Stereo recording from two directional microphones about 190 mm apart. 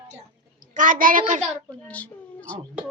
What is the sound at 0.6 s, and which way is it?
Speech, 45° right (ahead or behind).